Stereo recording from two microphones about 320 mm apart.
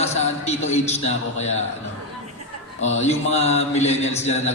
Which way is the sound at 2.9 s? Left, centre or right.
Left.